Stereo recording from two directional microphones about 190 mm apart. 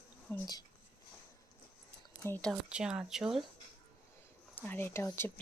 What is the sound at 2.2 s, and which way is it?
Speech, 10° left (ahead or behind).